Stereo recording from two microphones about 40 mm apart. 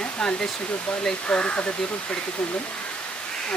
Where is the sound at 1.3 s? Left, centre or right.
Left.